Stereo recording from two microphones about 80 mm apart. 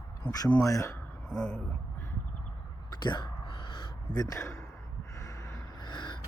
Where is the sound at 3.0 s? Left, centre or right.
Left.